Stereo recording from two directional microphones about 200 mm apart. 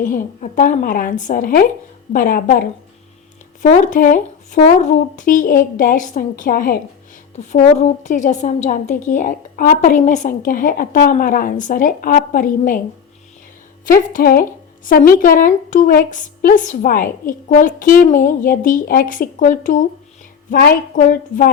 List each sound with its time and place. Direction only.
0.0 s a woman's voice: 45° left (ahead or behind)
13.8 s a woman's voice: 45° left (ahead or behind)